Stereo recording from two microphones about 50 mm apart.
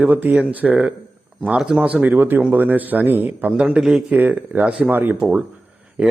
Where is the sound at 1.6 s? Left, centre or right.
Centre.